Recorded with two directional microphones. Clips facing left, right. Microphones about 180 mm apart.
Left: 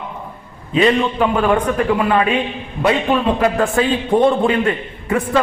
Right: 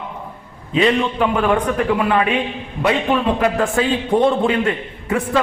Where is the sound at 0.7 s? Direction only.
45° left (ahead or behind).